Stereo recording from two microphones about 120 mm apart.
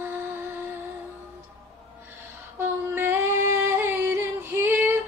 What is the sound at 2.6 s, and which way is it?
Female singing, 20° right (ahead or behind).